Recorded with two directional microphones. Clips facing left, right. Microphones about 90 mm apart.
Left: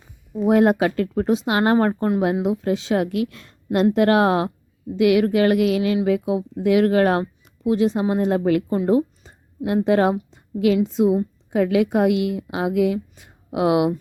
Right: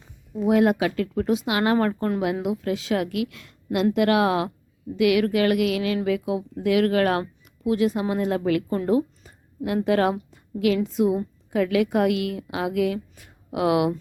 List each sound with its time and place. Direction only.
0.4 s speech: 40° left (ahead or behind)
8.9 s a sound: 25° left (ahead or behind)
9.6 s a woman's voice: 30° left (ahead or behind)